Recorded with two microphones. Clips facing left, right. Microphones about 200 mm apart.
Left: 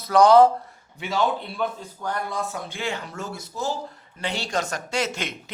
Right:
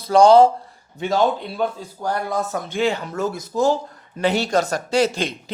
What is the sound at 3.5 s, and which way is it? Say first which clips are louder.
Speech: right 10 dB; 90° right.